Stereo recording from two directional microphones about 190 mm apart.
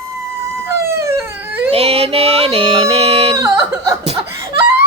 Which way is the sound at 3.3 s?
15° right (ahead or behind).